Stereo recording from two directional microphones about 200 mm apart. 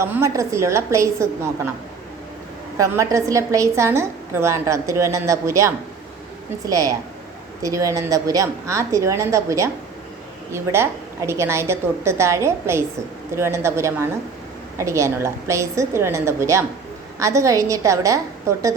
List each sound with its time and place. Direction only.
0.0 s a woman's voice: 15° right (ahead or behind)
2.7 s a woman's voice: 15° right (ahead or behind)